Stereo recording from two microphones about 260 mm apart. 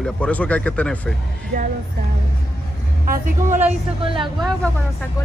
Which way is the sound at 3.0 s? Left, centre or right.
Right.